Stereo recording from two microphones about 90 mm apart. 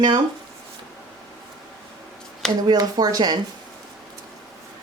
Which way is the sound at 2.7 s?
45° right (ahead or behind).